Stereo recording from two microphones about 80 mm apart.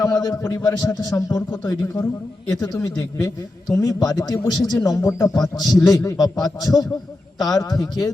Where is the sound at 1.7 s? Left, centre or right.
Left.